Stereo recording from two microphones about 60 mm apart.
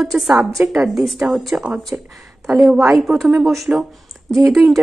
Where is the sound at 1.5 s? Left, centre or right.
Right.